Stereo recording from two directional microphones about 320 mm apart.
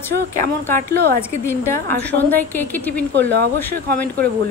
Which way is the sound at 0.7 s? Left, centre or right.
Right.